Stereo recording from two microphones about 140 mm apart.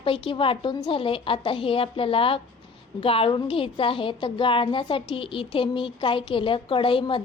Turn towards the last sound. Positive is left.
turn(degrees=40)  # may be behind; listen again after turning